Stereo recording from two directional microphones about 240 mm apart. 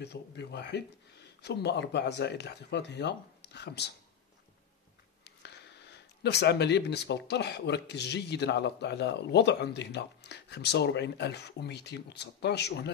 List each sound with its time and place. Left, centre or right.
0.0 s speech: left
5.2 s speech: left